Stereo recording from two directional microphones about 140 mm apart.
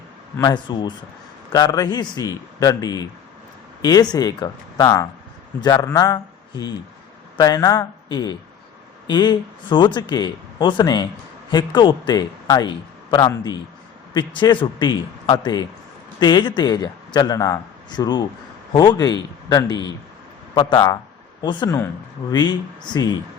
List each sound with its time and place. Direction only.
0.3 s a man's voice: 30° left (ahead or behind)
7.3 s a man's voice: 30° left (ahead or behind)